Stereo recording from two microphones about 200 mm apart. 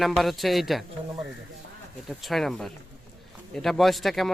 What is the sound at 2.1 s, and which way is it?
Speech, centre (ahead or behind).